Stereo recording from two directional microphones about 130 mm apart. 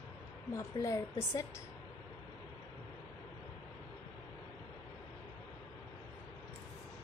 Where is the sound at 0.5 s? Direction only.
25° left (ahead or behind).